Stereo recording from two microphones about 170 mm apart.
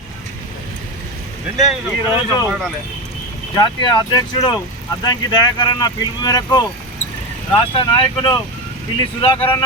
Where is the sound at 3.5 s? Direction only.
25° left (ahead or behind).